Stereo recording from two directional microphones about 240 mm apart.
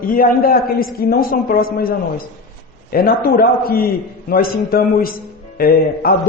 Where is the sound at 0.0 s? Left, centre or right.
Left.